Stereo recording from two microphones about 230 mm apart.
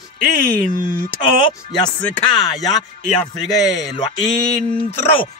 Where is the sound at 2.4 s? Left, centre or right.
Centre.